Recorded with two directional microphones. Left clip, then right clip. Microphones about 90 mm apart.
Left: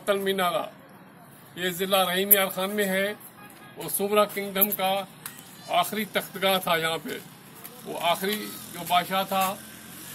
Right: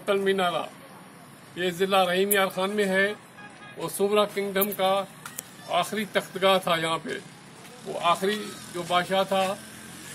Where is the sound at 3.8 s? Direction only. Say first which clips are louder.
Even; 20° right (ahead or behind).